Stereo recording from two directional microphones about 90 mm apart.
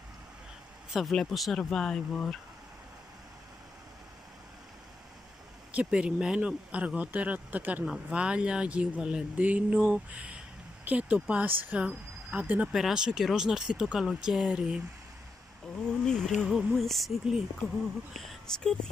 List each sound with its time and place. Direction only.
0.9 s speech: centre (ahead or behind)
5.7 s speech: 15° right (ahead or behind)
16.1 s speech: 5° left (ahead or behind)